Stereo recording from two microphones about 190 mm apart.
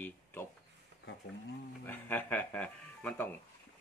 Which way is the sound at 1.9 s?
10° left (ahead or behind).